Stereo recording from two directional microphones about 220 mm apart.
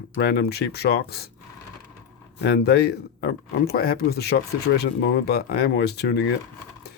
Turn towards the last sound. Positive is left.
turn(degrees=50)  # may be behind; listen again after turning